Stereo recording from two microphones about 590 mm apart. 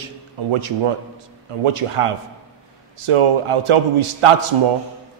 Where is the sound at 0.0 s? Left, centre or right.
Right.